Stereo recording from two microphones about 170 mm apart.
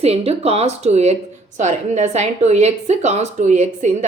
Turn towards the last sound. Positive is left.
turn(degrees=-45)  # may be behind; listen again after turning